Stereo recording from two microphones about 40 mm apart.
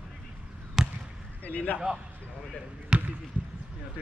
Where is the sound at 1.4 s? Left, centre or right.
Left.